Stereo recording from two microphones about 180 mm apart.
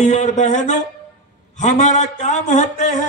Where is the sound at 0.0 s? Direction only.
40° left (ahead or behind).